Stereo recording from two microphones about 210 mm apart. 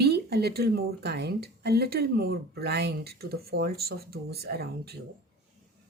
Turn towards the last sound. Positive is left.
turn(degrees=-50)  # may be behind; listen again after turning